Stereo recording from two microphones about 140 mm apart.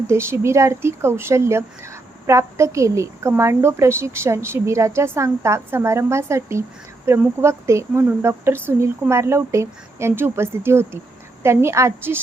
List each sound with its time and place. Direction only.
0.1 s speech: 20° right (ahead or behind)